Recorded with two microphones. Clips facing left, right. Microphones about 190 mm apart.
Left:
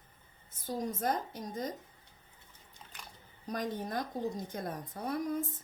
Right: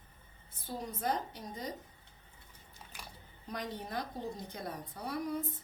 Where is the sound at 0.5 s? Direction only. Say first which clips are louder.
Left 5 dB; 45° left (ahead or behind).